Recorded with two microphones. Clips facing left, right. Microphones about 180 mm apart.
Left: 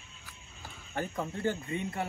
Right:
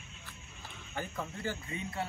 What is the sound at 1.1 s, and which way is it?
Speech, 35° left (ahead or behind).